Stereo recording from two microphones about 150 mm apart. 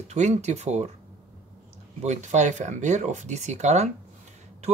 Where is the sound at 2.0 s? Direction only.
50° right (ahead or behind).